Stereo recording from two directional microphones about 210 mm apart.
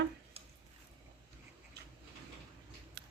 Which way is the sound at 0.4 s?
25° right (ahead or behind).